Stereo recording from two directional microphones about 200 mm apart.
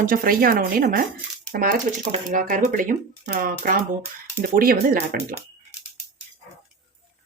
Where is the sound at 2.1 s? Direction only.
40° right (ahead or behind).